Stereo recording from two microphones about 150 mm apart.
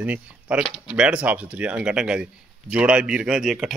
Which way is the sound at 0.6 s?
35° left (ahead or behind).